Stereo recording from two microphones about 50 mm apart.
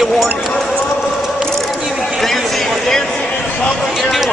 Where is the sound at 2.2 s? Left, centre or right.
Centre.